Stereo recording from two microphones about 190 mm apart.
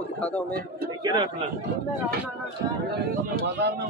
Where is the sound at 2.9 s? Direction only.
60° right (ahead or behind).